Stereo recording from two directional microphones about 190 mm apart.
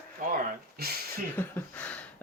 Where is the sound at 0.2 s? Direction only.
45° right (ahead or behind).